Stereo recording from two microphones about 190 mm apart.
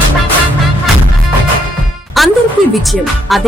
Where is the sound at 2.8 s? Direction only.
Centre (ahead or behind).